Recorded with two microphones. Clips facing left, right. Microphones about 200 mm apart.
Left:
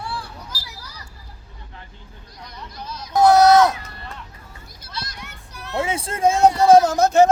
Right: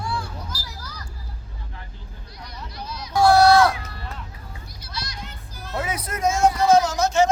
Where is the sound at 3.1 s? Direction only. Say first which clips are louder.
Left 2 dB; 20° left (ahead or behind).